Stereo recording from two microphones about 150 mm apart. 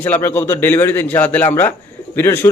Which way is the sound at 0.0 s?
10° left (ahead or behind).